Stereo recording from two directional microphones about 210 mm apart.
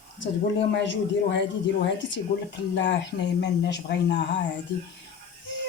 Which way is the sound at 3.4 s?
55° left (ahead or behind).